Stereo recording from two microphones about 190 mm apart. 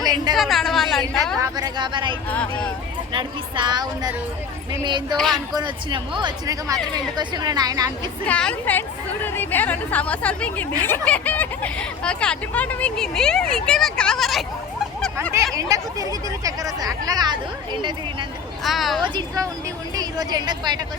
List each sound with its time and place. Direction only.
0.3 s a sound: centre (ahead or behind)
1.4 s speech: 20° right (ahead or behind)
2.3 s speech: 5° left (ahead or behind)
3.1 s speech: 25° right (ahead or behind)
5.1 s speech: centre (ahead or behind)
5.5 s speech: 25° right (ahead or behind)
8.3 s speech: 5° left (ahead or behind)
15.5 s speech: 15° right (ahead or behind)
18.6 s speech: centre (ahead or behind)
19.0 s speech: 25° right (ahead or behind)